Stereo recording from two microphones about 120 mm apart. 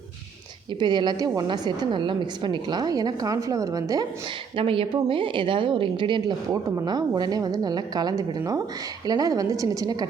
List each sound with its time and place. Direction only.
0.8 s a woman's voice: 40° right (ahead or behind)
4.5 s a woman's voice: 50° right (ahead or behind)
6.5 s a woman's voice: 25° right (ahead or behind)